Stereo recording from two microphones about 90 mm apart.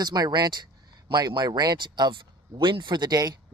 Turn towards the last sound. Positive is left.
turn(degrees=-45)  # may be behind; listen again after turning